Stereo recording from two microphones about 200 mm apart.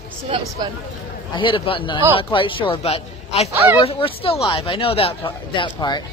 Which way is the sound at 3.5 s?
15° right (ahead or behind).